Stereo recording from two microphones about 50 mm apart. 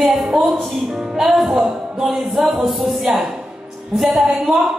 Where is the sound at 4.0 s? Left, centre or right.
Centre.